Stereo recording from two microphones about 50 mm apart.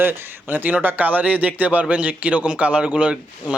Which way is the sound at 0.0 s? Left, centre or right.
Right.